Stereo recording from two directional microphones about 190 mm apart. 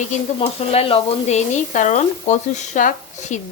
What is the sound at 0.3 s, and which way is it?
Speech, 30° left (ahead or behind).